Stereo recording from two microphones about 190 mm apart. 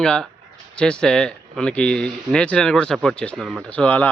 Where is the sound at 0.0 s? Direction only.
5° left (ahead or behind).